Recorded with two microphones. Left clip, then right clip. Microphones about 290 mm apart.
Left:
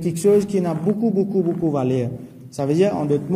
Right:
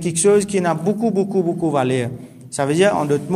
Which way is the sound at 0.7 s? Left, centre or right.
Right.